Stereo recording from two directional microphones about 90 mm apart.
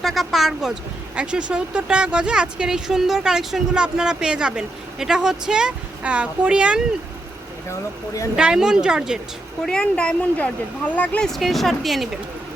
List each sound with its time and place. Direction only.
0.0 s speech: centre (ahead or behind)
7.7 s speech: 35° left (ahead or behind)
8.4 s speech: 10° right (ahead or behind)
9.6 s speech: 10° left (ahead or behind)
11.3 s speech: centre (ahead or behind)